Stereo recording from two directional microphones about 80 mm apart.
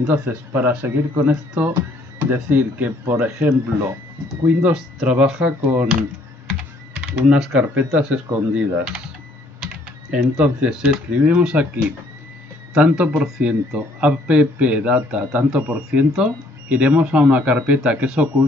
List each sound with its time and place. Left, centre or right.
0.0 s speech: right
4.7 s speech: centre
7.0 s speech: centre
7.6 s speech: centre
10.1 s speech: centre